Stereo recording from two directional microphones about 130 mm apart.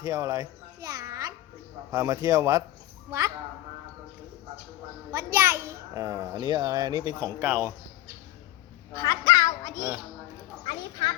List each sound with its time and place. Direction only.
0.0 s babbling: 30° right (ahead or behind)
1.9 s a child's voice: 25° right (ahead or behind)
5.1 s a child's voice: 20° right (ahead or behind)
8.9 s a sound: 25° left (ahead or behind)